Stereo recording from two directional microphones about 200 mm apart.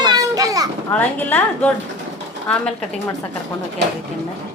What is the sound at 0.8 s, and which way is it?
Speech, 10° left (ahead or behind).